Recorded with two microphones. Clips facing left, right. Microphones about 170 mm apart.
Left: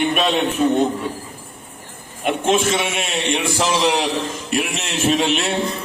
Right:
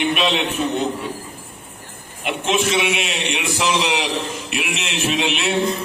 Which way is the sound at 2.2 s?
45° left (ahead or behind).